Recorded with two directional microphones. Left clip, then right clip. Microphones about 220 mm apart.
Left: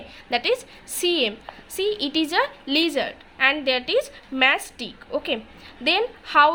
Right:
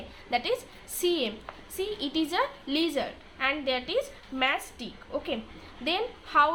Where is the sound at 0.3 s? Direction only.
45° left (ahead or behind).